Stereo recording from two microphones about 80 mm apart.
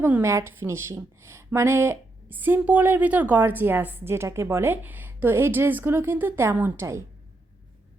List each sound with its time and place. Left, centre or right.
0.2 s a woman's voice: right